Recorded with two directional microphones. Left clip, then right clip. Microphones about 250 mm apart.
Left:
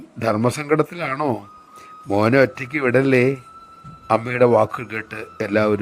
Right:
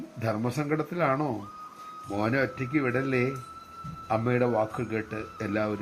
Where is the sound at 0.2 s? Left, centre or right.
Left.